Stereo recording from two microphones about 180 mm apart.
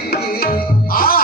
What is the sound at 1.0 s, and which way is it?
Music, 55° left (ahead or behind).